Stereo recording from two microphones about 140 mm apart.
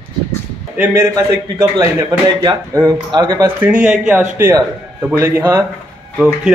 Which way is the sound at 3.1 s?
35° right (ahead or behind).